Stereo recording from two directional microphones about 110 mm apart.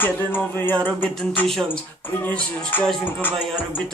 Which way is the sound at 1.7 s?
15° left (ahead or behind).